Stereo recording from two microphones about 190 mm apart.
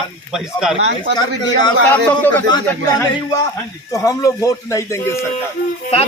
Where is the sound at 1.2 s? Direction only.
20° left (ahead or behind).